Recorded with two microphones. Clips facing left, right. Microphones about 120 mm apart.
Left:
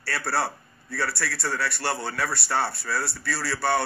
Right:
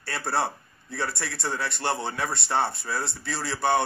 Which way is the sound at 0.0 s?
20° right (ahead or behind).